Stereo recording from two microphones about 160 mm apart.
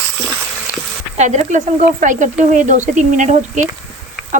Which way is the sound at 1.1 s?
45° right (ahead or behind).